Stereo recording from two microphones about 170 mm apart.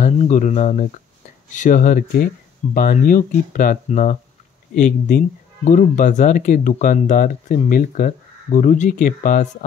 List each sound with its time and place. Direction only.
0.0 s speech: 45° left (ahead or behind)